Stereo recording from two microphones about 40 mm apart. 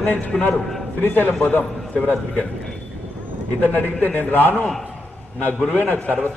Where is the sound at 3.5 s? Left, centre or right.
Left.